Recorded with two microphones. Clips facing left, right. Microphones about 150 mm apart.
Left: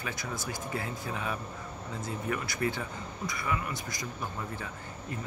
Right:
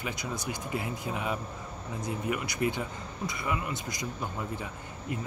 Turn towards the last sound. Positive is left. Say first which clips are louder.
# right 3 dB
turn(degrees=-20)  # may be behind; listen again after turning